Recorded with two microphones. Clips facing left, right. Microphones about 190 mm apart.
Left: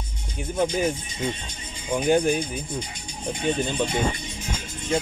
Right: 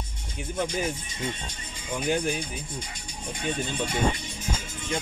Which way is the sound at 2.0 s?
45° left (ahead or behind).